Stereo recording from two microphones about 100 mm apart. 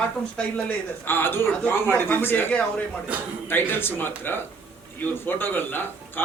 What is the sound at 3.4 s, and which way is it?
A man's voice, 20° left (ahead or behind).